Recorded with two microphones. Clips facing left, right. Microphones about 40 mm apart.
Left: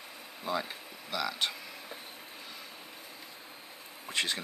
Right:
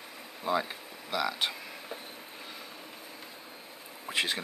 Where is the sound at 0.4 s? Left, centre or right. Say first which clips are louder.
Right 4 dB; centre.